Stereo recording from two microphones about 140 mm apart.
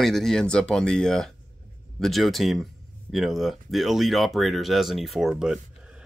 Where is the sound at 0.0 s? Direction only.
5° left (ahead or behind).